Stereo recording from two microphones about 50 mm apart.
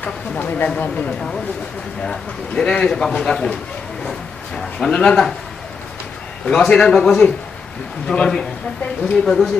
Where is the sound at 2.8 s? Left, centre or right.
Centre.